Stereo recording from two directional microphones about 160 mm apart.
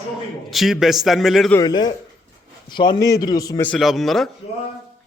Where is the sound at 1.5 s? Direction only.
25° left (ahead or behind).